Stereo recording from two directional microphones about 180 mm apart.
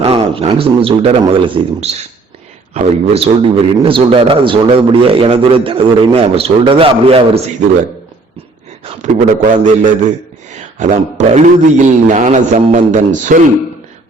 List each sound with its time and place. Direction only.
0.0 s a man's voice: 30° right (ahead or behind)
8.8 s a man's voice: 35° right (ahead or behind)
9.3 s a man's voice: 45° right (ahead or behind)
10.8 s a man's voice: 40° right (ahead or behind)